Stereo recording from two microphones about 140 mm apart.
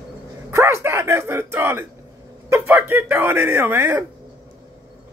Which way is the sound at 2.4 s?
20° right (ahead or behind).